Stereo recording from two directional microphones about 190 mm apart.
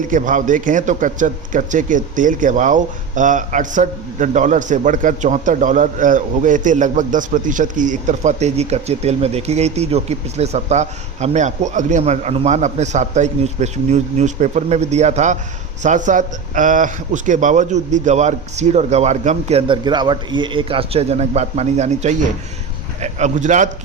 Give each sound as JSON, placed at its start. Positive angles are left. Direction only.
{"t": 0.1, "sound": "a man's voice", "side_deg": -45}